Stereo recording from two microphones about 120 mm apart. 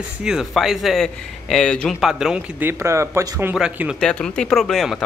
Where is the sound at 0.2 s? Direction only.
5° right (ahead or behind).